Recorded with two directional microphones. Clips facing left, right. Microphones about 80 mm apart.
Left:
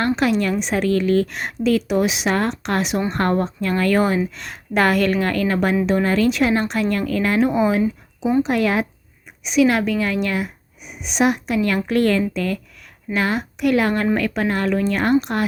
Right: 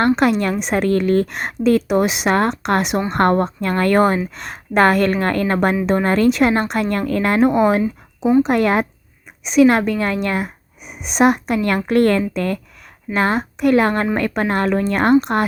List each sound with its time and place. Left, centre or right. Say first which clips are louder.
0.2 s a woman's voice: right 2 dB; right
8.2 s speech: right 4 dB; centre
8.4 s a woman's voice: right 3 dB; right